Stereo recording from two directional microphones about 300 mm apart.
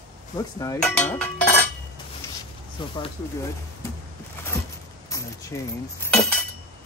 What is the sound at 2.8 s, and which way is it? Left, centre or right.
Speech, centre.